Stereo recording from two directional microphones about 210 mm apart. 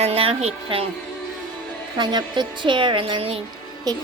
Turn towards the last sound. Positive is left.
turn(degrees=-20)  # may be behind; listen again after turning